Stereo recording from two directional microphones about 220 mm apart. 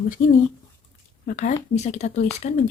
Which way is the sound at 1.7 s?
30° left (ahead or behind).